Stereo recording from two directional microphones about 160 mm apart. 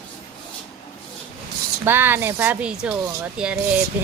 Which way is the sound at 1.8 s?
15° right (ahead or behind).